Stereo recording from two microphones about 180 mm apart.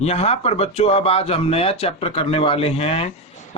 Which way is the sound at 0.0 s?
35° left (ahead or behind).